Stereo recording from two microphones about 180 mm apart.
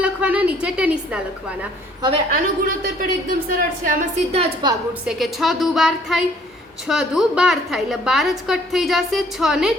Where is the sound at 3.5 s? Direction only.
50° right (ahead or behind).